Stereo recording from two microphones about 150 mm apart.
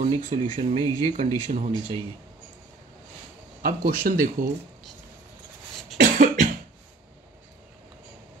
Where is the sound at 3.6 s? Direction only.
70° right (ahead or behind).